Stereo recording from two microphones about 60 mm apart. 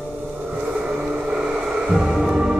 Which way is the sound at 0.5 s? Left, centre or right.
Centre.